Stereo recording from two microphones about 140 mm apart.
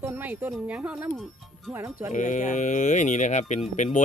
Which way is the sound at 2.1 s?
60° left (ahead or behind).